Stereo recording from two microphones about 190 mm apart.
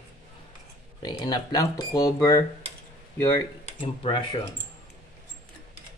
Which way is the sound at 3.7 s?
35° left (ahead or behind).